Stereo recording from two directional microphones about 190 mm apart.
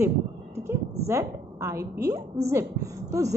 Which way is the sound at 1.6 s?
15° right (ahead or behind).